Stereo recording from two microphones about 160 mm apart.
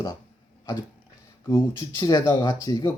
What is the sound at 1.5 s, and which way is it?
Speech, 20° left (ahead or behind).